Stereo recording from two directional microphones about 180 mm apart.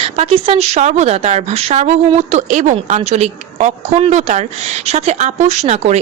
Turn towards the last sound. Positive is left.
turn(degrees=-40)  # may be behind; listen again after turning